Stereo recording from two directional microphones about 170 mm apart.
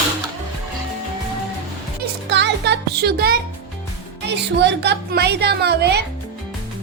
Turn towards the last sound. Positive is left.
turn(degrees=-75)  # may be behind; listen again after turning